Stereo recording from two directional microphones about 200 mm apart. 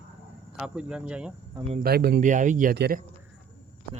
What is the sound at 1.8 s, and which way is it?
Speech, 50° right (ahead or behind).